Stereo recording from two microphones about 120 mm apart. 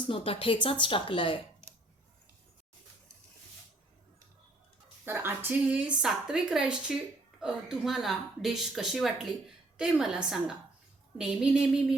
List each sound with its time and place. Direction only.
0.0 s speech: 50° left (ahead or behind)
5.0 s a woman's voice: 20° right (ahead or behind)